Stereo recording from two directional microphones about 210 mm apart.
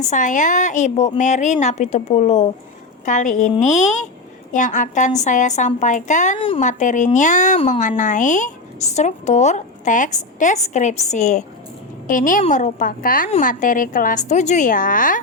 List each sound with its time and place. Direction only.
0.1 s speech: 35° left (ahead or behind)